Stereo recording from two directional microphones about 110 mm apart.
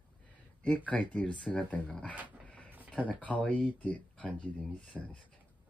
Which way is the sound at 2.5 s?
10° left (ahead or behind).